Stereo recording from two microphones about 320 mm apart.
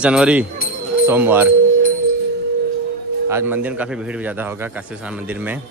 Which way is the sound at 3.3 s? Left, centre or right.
Centre.